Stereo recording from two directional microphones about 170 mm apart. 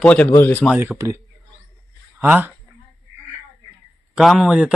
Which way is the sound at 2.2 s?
10° right (ahead or behind).